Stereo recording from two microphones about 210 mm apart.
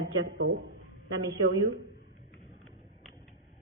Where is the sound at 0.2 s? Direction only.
60° right (ahead or behind).